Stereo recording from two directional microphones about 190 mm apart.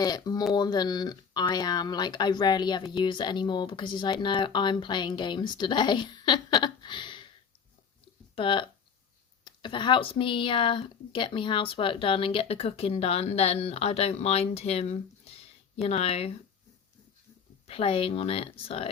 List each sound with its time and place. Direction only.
0.0 s speech: 20° left (ahead or behind)
8.4 s speech: 25° left (ahead or behind)
17.7 s speech: 30° left (ahead or behind)